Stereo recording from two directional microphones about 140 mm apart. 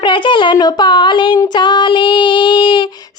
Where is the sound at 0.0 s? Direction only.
35° left (ahead or behind).